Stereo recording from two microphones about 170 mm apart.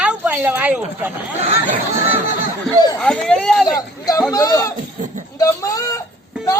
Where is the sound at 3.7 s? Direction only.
20° left (ahead or behind).